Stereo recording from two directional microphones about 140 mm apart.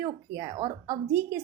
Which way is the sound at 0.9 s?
15° right (ahead or behind).